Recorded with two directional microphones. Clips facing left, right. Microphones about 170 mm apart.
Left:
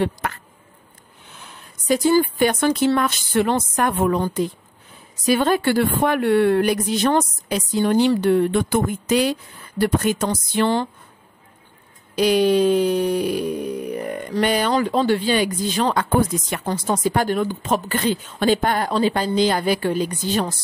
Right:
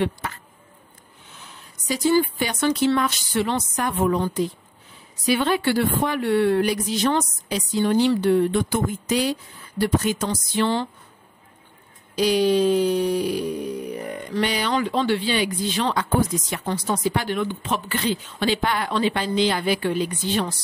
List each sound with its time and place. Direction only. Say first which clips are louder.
0.2 s a sound: left 5 dB; 55° left (ahead or behind)
1.4 s speech: left 2 dB; 55° left (ahead or behind)
5.2 s speech: left 3 dB; 45° left (ahead or behind)
12.2 s speech: left 2 dB; 55° left (ahead or behind)